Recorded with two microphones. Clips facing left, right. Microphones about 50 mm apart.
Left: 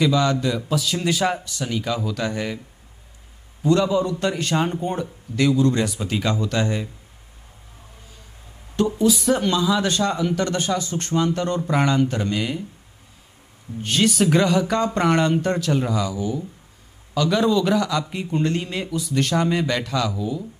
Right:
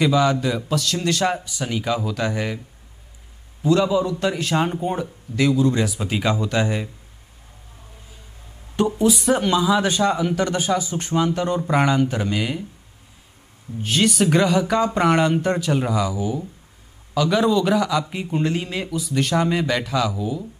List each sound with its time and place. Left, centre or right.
0.0 s speech: centre
0.7 s a man's voice: centre
1.3 s speech: centre
3.6 s a man's voice: centre
8.7 s speech: right
9.1 s speech: centre
13.8 s a man's voice: centre